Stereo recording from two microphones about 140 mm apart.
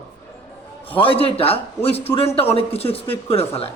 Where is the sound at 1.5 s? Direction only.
15° left (ahead or behind).